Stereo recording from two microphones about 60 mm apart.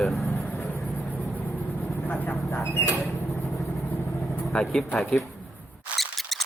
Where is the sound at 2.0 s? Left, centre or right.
Left.